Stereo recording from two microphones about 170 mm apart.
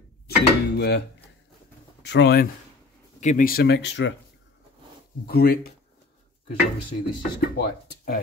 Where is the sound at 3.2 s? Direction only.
50° left (ahead or behind); by 4.2 s 90° left.